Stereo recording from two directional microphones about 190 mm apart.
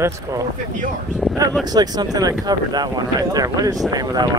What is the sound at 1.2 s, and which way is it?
Speech, centre (ahead or behind).